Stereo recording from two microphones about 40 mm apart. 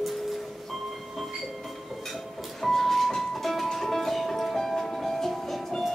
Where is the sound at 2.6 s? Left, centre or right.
Centre.